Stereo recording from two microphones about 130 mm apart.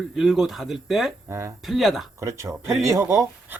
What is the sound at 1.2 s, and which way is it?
Speech, 20° right (ahead or behind).